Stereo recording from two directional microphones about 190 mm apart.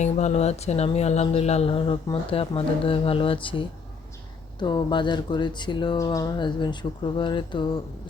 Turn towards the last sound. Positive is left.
turn(degrees=25)  # may be behind; listen again after turning